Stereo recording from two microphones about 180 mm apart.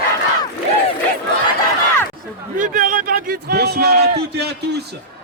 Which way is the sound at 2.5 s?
50° right (ahead or behind).